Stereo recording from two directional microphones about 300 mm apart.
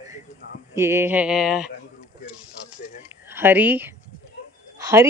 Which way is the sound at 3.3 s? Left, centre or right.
Centre.